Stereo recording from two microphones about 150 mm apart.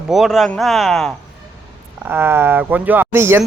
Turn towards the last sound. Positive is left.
turn(degrees=-15)  # may be behind; listen again after turning